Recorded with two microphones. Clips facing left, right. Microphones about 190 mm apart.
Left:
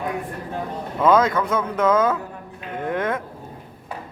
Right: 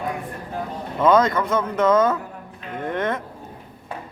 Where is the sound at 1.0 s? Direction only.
5° left (ahead or behind).